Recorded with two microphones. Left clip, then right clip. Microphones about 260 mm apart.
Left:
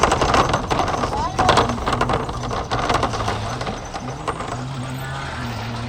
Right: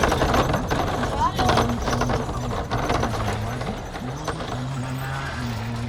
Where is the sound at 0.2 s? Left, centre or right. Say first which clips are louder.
Left 4 dB; left.